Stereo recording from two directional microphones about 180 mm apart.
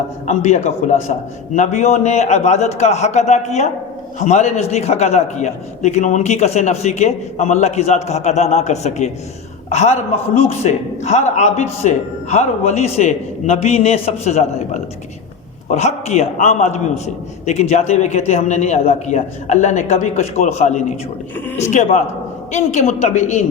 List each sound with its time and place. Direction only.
0.3 s a man's voice: 40° left (ahead or behind)